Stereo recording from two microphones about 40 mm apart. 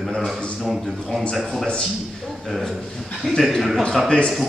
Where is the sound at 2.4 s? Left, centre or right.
Centre.